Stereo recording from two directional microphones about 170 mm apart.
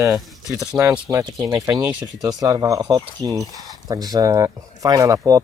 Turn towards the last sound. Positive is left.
turn(degrees=-20)  # may be behind; listen again after turning